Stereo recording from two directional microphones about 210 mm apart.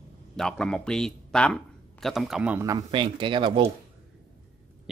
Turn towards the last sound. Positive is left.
turn(degrees=-25)  # may be behind; listen again after turning